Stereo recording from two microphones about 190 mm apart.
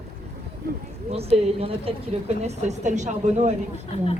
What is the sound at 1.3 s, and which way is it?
A woman's voice, 30° right (ahead or behind).